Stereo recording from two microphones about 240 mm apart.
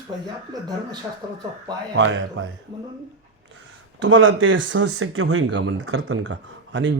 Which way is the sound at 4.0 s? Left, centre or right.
Right.